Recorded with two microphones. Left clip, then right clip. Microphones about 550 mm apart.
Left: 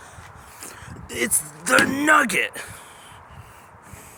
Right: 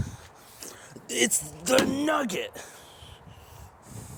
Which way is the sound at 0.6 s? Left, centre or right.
Right.